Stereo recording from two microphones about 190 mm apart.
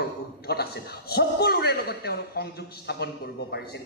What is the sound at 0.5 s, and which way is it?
A woman's voice, 55° left (ahead or behind).